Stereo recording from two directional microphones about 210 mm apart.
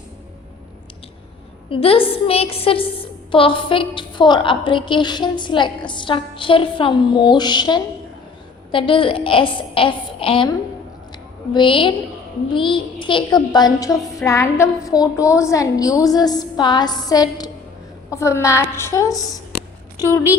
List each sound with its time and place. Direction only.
1.7 s a woman's voice: 25° left (ahead or behind)
11.5 s a woman's voice: 25° left (ahead or behind)